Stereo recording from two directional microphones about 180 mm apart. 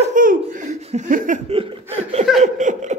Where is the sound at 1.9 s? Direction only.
35° right (ahead or behind).